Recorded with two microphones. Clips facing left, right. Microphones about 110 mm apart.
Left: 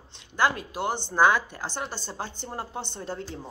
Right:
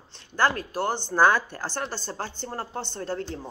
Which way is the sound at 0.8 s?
15° left (ahead or behind).